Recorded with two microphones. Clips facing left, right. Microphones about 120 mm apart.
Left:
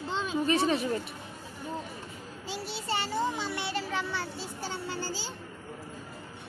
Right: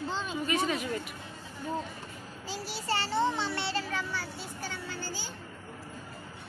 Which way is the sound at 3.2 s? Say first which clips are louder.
Right 2 dB; 10° left (ahead or behind).